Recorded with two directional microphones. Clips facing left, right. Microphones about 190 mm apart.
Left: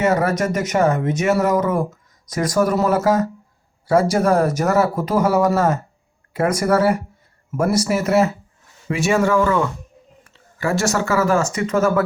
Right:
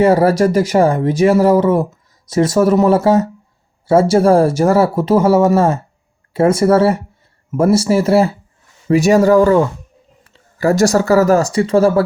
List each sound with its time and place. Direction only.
0.0 s speech: 30° right (ahead or behind)